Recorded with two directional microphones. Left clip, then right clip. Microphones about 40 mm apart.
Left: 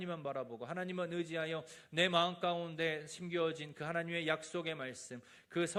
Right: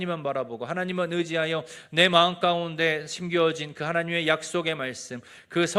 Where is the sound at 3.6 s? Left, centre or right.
Centre.